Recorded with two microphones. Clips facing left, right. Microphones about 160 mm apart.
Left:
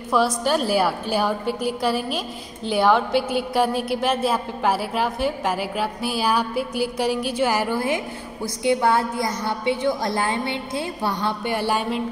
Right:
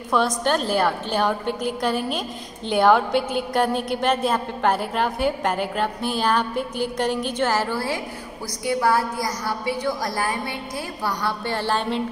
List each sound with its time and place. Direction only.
0.1 s a woman's voice: 5° left (ahead or behind)